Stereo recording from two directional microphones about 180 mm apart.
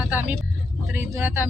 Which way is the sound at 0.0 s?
10° right (ahead or behind).